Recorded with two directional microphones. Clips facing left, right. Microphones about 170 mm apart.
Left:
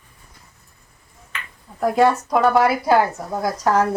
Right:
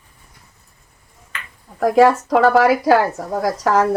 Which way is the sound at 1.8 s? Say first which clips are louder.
Right 4 dB; 90° right.